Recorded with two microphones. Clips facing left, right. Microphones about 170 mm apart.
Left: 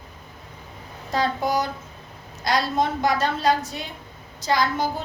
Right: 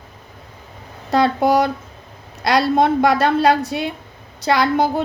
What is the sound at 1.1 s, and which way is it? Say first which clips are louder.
A woman's voice: right 8 dB; 70° right (ahead or behind).